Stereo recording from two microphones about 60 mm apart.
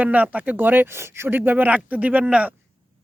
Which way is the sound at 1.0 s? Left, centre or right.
Right.